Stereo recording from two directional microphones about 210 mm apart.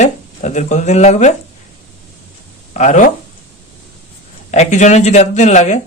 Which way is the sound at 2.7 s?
35° left (ahead or behind).